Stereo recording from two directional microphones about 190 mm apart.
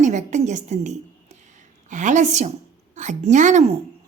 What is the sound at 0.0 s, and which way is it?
A woman's voice, 40° right (ahead or behind).